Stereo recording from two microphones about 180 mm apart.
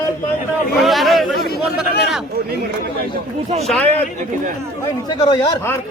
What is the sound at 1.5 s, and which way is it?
Chatter, 60° left (ahead or behind).